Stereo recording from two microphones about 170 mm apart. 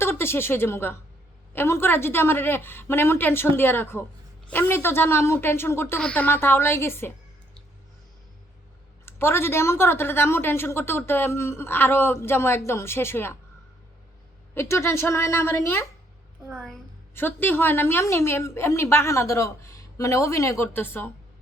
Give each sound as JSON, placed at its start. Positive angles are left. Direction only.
{"t": 0.0, "sound": "a woman's voice", "side_deg": 15}
{"t": 9.0, "sound": "a woman's voice", "side_deg": 15}
{"t": 14.5, "sound": "a woman's voice", "side_deg": 15}
{"t": 17.2, "sound": "a woman's voice", "side_deg": 10}